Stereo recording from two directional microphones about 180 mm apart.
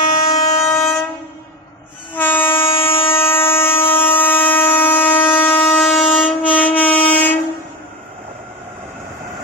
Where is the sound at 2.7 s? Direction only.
30° left (ahead or behind).